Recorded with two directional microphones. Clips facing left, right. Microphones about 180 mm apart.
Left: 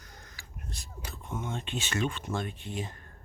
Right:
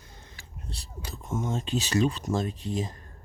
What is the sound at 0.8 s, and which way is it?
Speech, 40° right (ahead or behind).